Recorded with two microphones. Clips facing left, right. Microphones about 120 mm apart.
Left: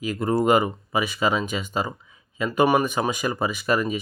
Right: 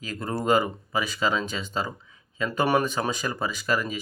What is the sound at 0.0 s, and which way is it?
Speech, 15° left (ahead or behind).